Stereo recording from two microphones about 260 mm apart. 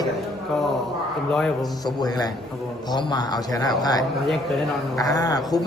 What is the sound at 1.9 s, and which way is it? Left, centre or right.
A man's voice, centre.